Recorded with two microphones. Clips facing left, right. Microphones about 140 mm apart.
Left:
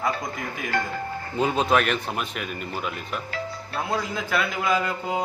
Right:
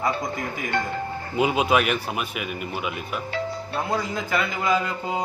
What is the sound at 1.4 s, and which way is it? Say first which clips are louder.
A man's voice: right 1 dB; 10° right (ahead or behind).